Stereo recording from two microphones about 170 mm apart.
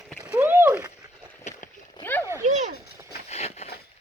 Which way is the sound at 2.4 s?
45° right (ahead or behind).